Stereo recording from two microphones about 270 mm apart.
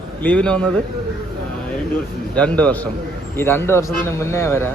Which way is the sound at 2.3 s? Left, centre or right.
Centre.